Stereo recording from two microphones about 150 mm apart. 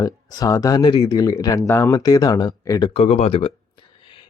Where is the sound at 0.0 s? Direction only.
25° left (ahead or behind).